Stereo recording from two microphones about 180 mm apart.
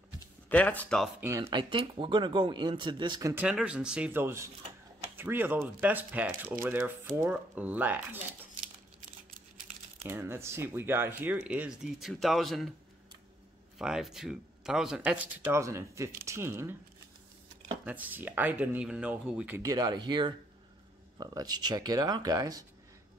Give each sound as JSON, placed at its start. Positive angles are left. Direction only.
{"t": 0.5, "sound": "speech", "side_deg": 10}
{"t": 1.4, "sound": "speech", "side_deg": -25}
{"t": 3.4, "sound": "speech", "side_deg": -5}
{"t": 10.0, "sound": "speech", "side_deg": -15}
{"t": 13.7, "sound": "speech", "side_deg": 0}
{"t": 17.8, "sound": "speech", "side_deg": -10}